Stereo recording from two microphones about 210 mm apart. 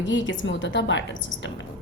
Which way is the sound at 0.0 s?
60° left (ahead or behind).